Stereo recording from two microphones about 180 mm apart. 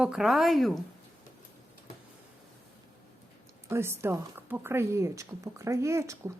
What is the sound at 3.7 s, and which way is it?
A woman's voice, 15° right (ahead or behind).